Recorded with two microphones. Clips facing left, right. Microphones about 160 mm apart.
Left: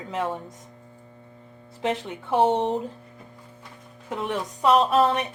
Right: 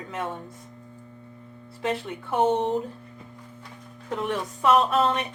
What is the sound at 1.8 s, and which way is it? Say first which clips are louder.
Speech: left 1 dB; 20° left (ahead or behind).